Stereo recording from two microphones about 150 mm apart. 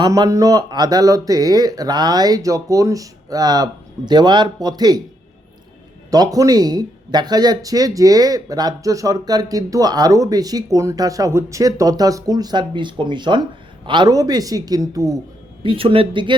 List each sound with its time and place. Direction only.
0.0 s speech: 25° right (ahead or behind)
6.1 s speech: 25° right (ahead or behind)
15.6 s speech: 35° right (ahead or behind)